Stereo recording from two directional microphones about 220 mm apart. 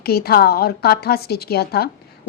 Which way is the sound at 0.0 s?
45° left (ahead or behind).